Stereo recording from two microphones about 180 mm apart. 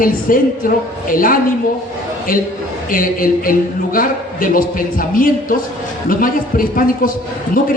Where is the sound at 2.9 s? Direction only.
50° left (ahead or behind).